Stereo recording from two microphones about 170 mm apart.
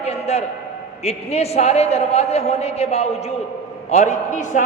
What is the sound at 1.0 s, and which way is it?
A man's voice, 40° left (ahead or behind).